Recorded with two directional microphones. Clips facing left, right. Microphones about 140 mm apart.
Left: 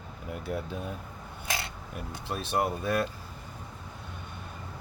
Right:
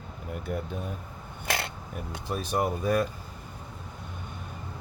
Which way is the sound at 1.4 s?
65° right (ahead or behind).